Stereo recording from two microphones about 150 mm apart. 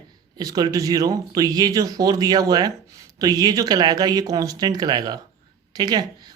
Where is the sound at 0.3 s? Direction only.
25° right (ahead or behind).